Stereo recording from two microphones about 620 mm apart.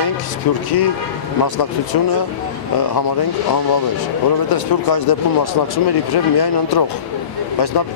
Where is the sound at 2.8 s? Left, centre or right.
Left.